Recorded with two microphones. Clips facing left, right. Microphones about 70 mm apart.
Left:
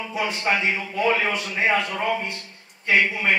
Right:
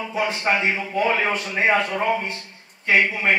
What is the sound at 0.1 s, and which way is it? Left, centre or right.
Speech, right.